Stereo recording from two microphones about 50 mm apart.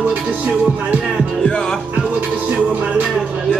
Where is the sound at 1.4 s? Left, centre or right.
Centre.